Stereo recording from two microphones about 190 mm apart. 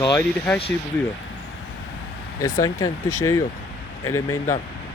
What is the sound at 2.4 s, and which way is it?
Speech, 20° left (ahead or behind).